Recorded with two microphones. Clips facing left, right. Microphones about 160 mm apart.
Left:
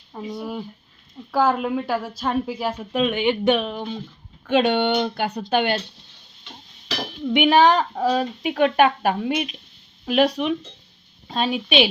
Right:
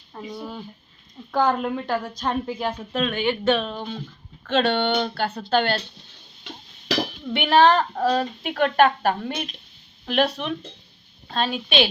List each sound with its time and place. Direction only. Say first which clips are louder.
0.3 s a woman's voice: left 4 dB; 5° left (ahead or behind)
7.3 s a woman's voice: left 2 dB; 15° left (ahead or behind)